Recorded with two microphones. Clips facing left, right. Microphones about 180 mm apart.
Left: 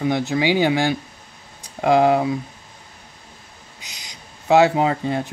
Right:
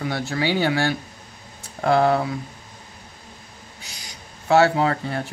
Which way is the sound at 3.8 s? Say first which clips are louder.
Even; 20° left (ahead or behind).